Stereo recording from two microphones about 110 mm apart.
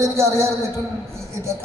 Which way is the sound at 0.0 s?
25° right (ahead or behind).